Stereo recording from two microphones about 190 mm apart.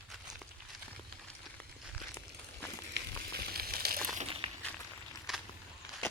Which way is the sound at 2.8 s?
60° right (ahead or behind).